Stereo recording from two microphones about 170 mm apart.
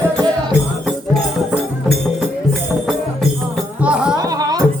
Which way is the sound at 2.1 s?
Centre (ahead or behind).